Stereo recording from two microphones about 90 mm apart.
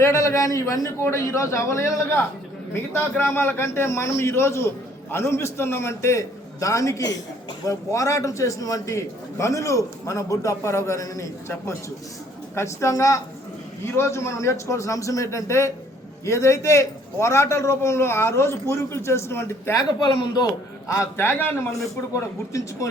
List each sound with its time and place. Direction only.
0.0 s a man's voice: 35° left (ahead or behind)
20.8 s a man's voice: 30° left (ahead or behind)